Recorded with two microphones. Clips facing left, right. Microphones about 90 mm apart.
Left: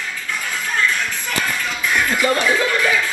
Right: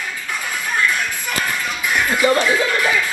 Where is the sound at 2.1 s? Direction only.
20° right (ahead or behind).